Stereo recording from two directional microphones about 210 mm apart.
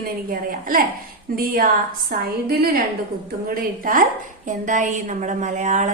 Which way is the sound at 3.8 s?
40° right (ahead or behind).